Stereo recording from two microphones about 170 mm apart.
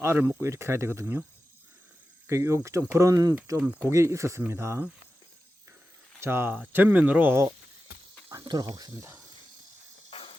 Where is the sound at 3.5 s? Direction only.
10° right (ahead or behind).